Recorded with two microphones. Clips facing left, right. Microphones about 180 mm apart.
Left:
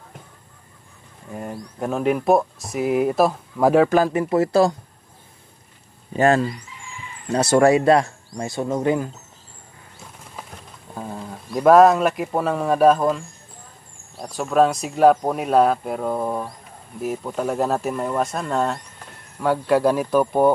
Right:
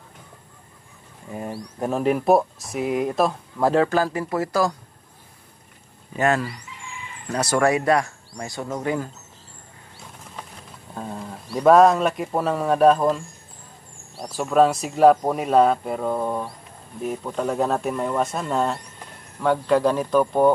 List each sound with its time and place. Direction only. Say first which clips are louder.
1.3 s speech: even; 10° right (ahead or behind); by 4.7 s 30° left (ahead or behind)
6.1 s speech: left 4 dB; 30° left (ahead or behind)
11.0 s a sound: left 1 dB; centre (ahead or behind)
11.5 s speech: left 2 dB; centre (ahead or behind)
14.3 s speech: even; centre (ahead or behind)